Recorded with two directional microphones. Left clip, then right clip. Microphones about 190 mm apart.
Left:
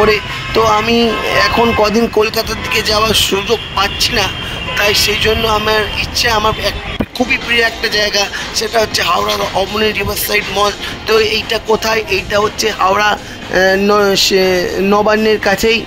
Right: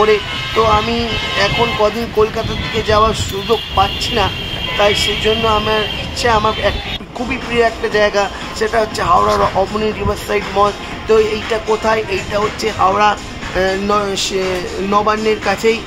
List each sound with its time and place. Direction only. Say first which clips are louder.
0.0 s speech: left 1 dB; 45° left (ahead or behind)
3.7 s speech: left 2 dB; 50° left (ahead or behind)
10.3 s speech: left 1 dB; 50° left (ahead or behind)